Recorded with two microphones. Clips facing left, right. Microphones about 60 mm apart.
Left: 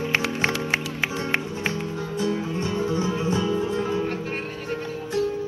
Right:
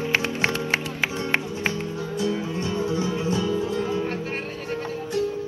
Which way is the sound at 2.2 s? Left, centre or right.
Centre.